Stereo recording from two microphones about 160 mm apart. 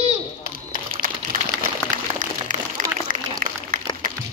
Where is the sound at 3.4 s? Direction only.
60° right (ahead or behind).